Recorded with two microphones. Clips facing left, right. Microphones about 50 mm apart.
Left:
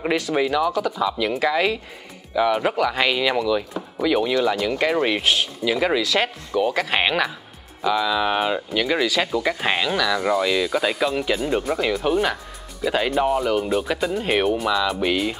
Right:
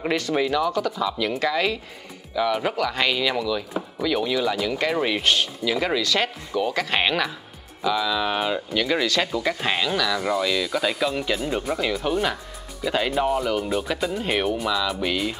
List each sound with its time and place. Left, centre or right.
0.0 s speech: centre